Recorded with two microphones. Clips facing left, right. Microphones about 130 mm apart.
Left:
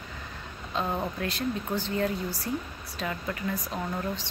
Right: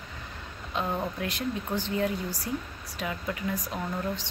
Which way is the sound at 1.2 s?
15° right (ahead or behind).